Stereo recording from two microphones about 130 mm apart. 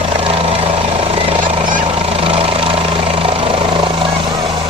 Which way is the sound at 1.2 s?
45° right (ahead or behind).